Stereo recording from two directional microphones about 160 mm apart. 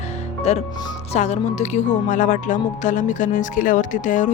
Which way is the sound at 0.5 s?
45° left (ahead or behind).